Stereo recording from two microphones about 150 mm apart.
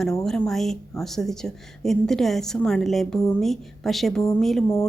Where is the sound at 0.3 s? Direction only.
5° left (ahead or behind).